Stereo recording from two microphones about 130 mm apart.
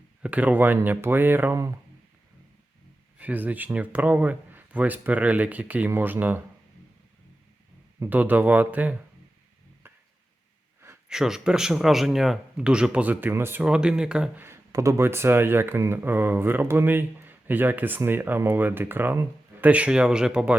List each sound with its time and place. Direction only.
0.2 s speech: 10° right (ahead or behind)
3.2 s speech: 10° right (ahead or behind)
7.9 s speech: 15° right (ahead or behind)
9.8 s a sound: 15° right (ahead or behind)
11.1 s speech: 5° right (ahead or behind)
14.4 s speech: 20° right (ahead or behind)